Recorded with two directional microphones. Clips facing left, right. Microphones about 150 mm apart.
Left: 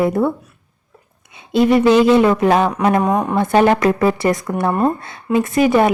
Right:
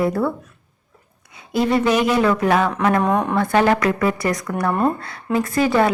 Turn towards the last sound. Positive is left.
turn(degrees=20)  # may be behind; listen again after turning